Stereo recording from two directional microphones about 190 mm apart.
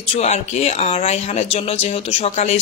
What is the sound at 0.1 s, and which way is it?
Speech, 35° left (ahead or behind).